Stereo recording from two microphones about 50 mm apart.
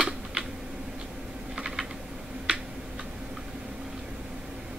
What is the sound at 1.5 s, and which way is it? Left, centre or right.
Typing, centre.